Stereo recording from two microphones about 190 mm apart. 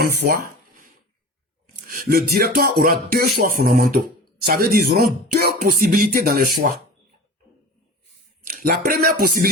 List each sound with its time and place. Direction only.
0.0 s speech: 55° right (ahead or behind)
1.9 s music: 50° right (ahead or behind)
8.4 s a sound: 50° right (ahead or behind)
8.8 s music: 50° right (ahead or behind)